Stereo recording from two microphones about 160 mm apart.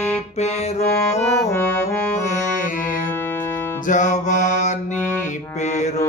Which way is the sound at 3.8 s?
50° left (ahead or behind).